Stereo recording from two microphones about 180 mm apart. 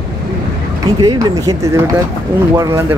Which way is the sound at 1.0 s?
20° right (ahead or behind).